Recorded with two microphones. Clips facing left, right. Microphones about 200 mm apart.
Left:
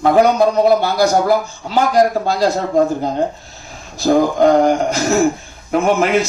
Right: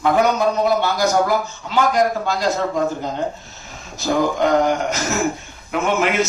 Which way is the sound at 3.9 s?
35° left (ahead or behind).